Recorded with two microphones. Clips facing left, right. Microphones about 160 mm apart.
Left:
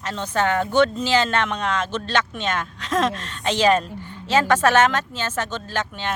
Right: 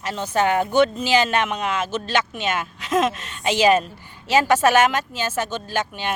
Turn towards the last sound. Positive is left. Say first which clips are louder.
# right 2 dB
turn(degrees=-10)  # may be behind; listen again after turning